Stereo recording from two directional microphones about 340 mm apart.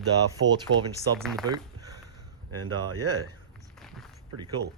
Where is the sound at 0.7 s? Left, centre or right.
Right.